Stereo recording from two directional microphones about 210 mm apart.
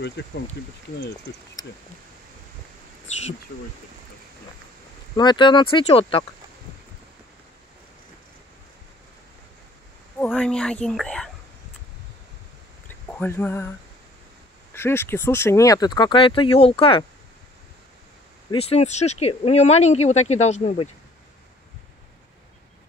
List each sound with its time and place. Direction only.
0.2 s speech: 55° left (ahead or behind)
5.1 s speech: 20° left (ahead or behind)
10.2 s speech: 5° left (ahead or behind)
12.8 s a sound: 10° left (ahead or behind)
14.7 s speech: 10° left (ahead or behind)
18.5 s speech: 30° left (ahead or behind)